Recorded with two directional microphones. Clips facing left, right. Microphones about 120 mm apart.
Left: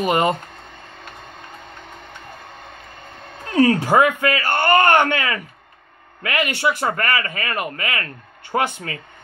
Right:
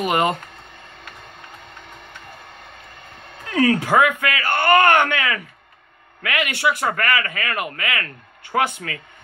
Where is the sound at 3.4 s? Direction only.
35° left (ahead or behind).